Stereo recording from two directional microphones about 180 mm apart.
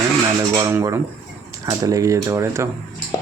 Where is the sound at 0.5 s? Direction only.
15° right (ahead or behind).